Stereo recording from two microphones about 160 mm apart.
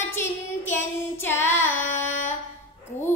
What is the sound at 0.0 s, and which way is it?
Child singing, 15° left (ahead or behind).